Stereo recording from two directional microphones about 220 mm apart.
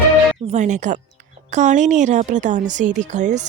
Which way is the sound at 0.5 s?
35° right (ahead or behind).